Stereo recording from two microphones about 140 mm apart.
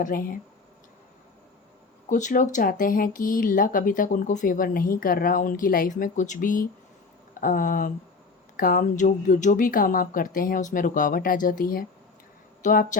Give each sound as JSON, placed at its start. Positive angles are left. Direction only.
{"t": 0.0, "sound": "speech", "side_deg": 85}
{"t": 2.0, "sound": "speech", "side_deg": 65}
{"t": 8.5, "sound": "speech", "side_deg": 80}
{"t": 12.6, "sound": "speech", "side_deg": 75}